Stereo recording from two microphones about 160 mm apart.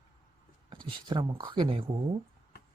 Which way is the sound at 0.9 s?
30° right (ahead or behind).